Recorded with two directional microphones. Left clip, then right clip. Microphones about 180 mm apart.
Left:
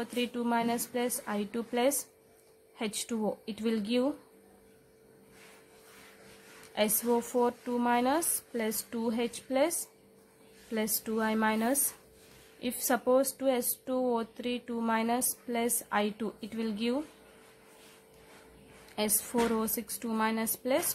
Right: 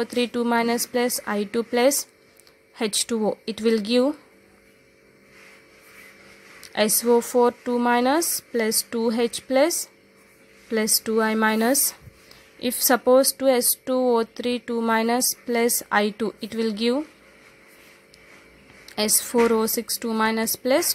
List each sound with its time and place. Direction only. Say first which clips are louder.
0.0 s speech: right 10 dB; 30° right (ahead or behind)
6.7 s speech: right 10 dB; 30° right (ahead or behind)
19.0 s speech: right 10 dB; 25° right (ahead or behind)